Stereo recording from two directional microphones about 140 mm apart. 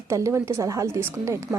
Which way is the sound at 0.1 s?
20° right (ahead or behind).